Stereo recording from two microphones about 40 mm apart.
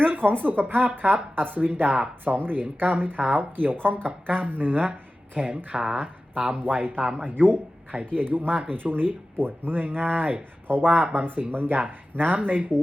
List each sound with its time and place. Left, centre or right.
0.0 s speech: right
4.9 s speech: right
5.7 s speech: centre
6.0 s speech: right
10.7 s speech: right